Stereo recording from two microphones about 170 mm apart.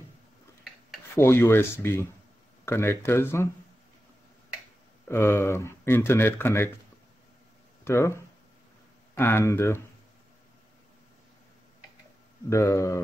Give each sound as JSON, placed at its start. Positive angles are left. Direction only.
{"t": 1.1, "sound": "speech", "side_deg": 15}
{"t": 5.0, "sound": "speech", "side_deg": 15}
{"t": 7.8, "sound": "speech", "side_deg": 15}
{"t": 12.4, "sound": "speech", "side_deg": 20}